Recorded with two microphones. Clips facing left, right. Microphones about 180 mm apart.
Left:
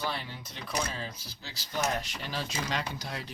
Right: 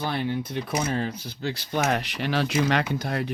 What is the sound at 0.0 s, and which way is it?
Speech, 60° right (ahead or behind).